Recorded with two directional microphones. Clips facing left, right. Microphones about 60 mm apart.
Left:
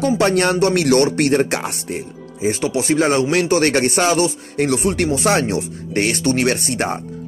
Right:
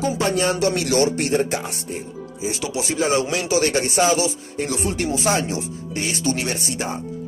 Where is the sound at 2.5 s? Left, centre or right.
Left.